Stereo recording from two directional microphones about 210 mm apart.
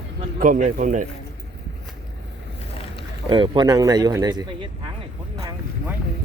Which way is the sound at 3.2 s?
25° right (ahead or behind).